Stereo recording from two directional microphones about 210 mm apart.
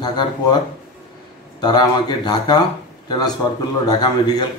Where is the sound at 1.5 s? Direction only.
20° left (ahead or behind).